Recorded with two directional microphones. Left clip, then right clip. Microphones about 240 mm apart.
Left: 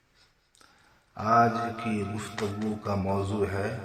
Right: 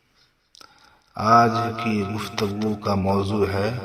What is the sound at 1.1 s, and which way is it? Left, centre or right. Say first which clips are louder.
Speech: right 6 dB; right.